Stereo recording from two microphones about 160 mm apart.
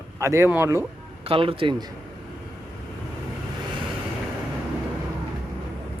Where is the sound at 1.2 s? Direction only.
35° right (ahead or behind).